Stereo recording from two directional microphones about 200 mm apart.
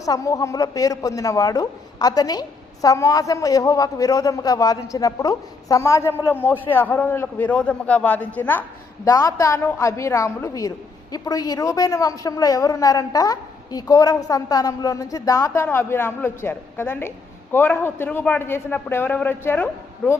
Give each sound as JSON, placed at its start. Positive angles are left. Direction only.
{"t": 0.0, "sound": "a woman's voice", "side_deg": 15}